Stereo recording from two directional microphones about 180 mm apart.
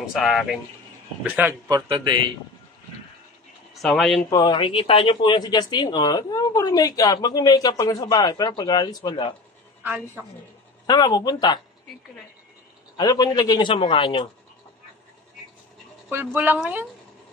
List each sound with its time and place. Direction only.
0.0 s speech: centre (ahead or behind)
1.9 s a man's voice: 25° right (ahead or behind)
3.8 s speech: centre (ahead or behind)
4.3 s speech: 25° left (ahead or behind)
9.8 s speech: 10° right (ahead or behind)
10.9 s speech: 20° left (ahead or behind)
12.9 s speech: 20° left (ahead or behind)
16.3 s speech: 10° right (ahead or behind)